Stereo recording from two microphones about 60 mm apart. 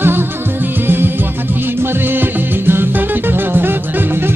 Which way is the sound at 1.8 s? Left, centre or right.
Right.